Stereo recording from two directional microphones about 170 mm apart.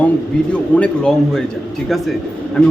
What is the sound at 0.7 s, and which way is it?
A man's voice, 5° left (ahead or behind).